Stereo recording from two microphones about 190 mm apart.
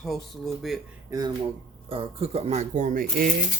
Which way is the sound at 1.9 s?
30° right (ahead or behind).